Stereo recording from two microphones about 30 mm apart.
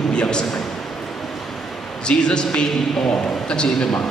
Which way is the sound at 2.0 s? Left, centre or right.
Left.